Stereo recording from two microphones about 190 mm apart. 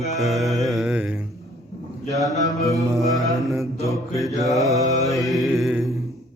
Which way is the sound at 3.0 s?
Centre (ahead or behind).